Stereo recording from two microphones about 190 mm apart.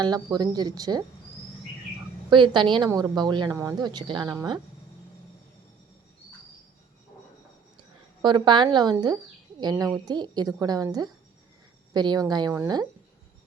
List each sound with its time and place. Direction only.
0.0 s a woman's voice: 20° right (ahead or behind)
2.3 s a woman's voice: 25° right (ahead or behind)
7.8 s a woman's voice: 25° right (ahead or behind)